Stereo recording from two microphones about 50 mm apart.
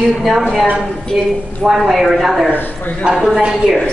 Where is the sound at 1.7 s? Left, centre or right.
Centre.